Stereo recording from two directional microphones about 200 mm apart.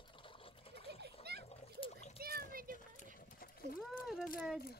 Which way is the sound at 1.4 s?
30° left (ahead or behind).